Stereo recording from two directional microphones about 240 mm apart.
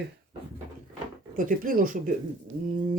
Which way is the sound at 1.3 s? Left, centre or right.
Right.